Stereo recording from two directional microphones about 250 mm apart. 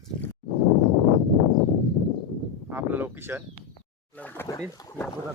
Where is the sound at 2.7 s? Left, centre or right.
Centre.